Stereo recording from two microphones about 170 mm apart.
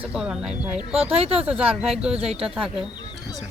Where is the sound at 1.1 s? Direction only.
35° right (ahead or behind).